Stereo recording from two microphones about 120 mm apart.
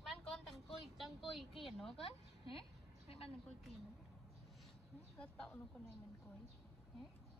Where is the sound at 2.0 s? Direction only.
55° left (ahead or behind).